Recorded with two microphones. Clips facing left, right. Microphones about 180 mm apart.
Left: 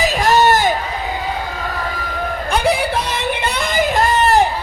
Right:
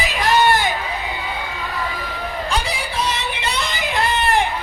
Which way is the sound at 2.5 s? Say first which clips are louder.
Left 10 dB; 60° left (ahead or behind).